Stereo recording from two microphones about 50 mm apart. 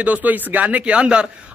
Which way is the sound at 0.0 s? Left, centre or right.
Right.